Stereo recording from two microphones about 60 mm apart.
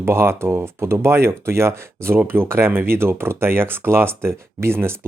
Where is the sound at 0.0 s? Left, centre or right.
Right.